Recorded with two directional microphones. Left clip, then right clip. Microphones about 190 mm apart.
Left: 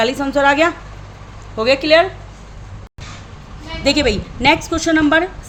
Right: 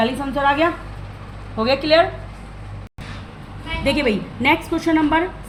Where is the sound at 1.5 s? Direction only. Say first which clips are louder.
Left 3 dB; 50° left (ahead or behind).